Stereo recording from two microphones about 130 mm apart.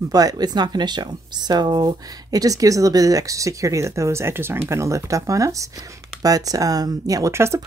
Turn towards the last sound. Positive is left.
turn(degrees=-20)  # may be behind; listen again after turning